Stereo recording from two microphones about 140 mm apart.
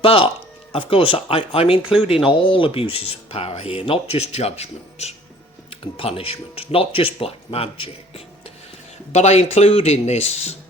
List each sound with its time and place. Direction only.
0.0 s speech: 40° left (ahead or behind)